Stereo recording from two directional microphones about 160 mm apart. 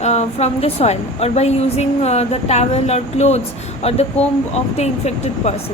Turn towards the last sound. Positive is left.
turn(degrees=45)  # may be behind; listen again after turning